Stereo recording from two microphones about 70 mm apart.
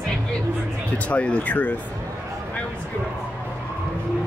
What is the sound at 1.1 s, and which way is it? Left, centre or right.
Speech, centre.